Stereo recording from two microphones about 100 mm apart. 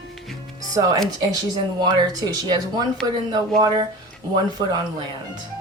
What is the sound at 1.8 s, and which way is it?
Speech, 45° right (ahead or behind).